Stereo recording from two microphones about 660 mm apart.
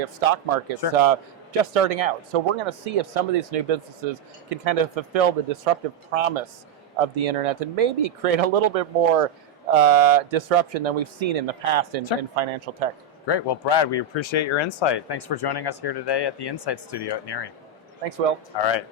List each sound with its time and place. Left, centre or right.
0.0 s a man's voice: right
13.2 s speech: left
18.5 s speech: left